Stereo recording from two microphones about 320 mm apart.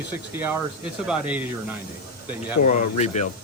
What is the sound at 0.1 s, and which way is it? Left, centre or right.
A man's voice, centre.